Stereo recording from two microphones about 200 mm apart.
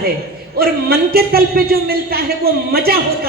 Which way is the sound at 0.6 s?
50° right (ahead or behind).